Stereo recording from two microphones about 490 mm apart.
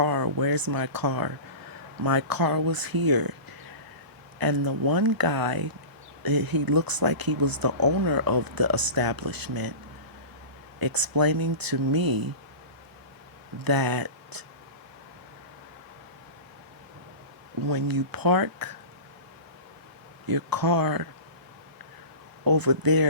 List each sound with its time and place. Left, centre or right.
0.0 s speech: right
4.4 s speech: right
10.8 s speech: right
13.7 s speech: right
17.6 s speech: right
20.2 s speech: right
22.4 s speech: right